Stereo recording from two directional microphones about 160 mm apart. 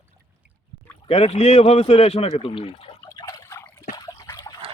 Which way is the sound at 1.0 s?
35° left (ahead or behind).